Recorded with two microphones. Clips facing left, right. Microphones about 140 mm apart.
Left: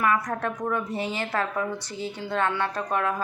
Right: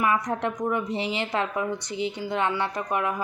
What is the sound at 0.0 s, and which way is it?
Speech, 20° right (ahead or behind).